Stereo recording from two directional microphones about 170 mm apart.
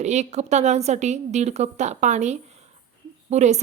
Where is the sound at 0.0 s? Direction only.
45° right (ahead or behind).